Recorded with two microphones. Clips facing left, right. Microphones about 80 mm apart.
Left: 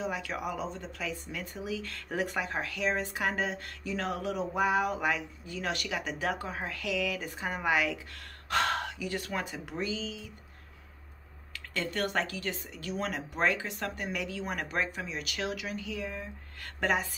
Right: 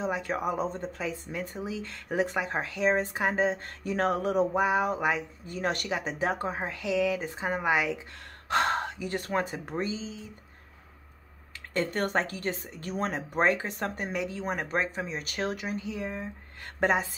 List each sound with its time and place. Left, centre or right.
0.0 s speech: right
0.9 s speech: right
3.8 s speech: right
4.6 s speech: right
5.5 s speech: right
5.9 s speech: right
11.7 s speech: right